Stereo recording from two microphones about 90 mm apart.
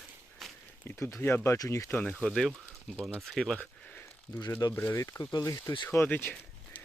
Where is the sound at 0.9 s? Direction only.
20° left (ahead or behind).